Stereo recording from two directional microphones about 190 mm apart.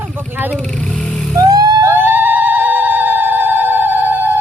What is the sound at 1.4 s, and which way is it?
Vehicle, 20° right (ahead or behind).